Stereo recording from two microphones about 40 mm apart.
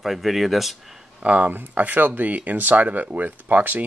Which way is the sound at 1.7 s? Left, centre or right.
Right.